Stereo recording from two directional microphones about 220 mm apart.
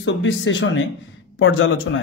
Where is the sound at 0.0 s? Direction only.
55° left (ahead or behind).